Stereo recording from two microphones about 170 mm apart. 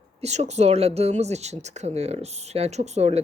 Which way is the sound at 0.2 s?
40° right (ahead or behind).